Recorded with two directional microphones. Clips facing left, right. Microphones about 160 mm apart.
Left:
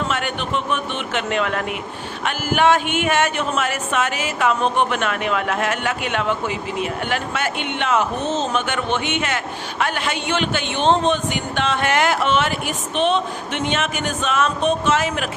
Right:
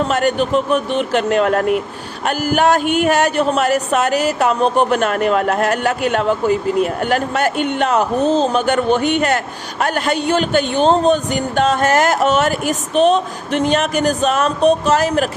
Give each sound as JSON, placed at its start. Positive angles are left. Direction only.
{"t": 0.1, "sound": "speech", "side_deg": -40}